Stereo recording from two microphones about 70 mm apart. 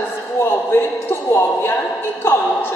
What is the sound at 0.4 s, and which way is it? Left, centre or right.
A woman's voice, left.